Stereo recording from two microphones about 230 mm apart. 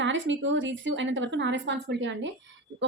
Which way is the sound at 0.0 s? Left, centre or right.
Right.